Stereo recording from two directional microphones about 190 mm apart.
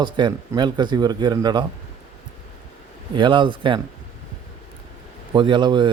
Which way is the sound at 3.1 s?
25° right (ahead or behind).